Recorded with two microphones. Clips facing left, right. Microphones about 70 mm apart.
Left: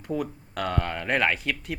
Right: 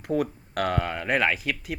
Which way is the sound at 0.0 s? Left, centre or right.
Right.